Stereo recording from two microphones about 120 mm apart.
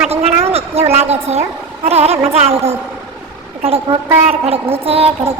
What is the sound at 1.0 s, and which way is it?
A woman's voice, 60° right (ahead or behind).